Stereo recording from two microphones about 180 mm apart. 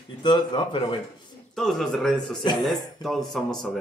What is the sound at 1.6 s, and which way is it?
Speech, centre (ahead or behind).